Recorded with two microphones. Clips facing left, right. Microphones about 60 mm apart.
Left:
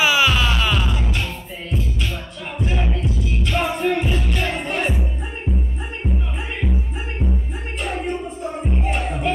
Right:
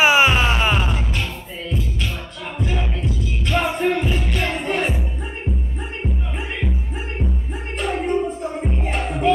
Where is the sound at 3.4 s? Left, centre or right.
Right.